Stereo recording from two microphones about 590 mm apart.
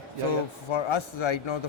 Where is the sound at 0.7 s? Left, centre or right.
Left.